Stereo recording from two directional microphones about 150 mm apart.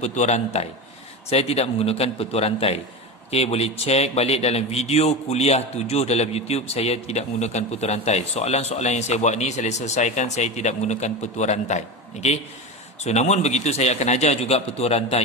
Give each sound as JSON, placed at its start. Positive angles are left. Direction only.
{"t": 0.0, "sound": "a man's voice", "side_deg": 50}